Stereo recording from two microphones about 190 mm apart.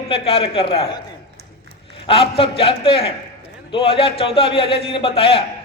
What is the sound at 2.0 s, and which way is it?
A man's voice, 30° left (ahead or behind).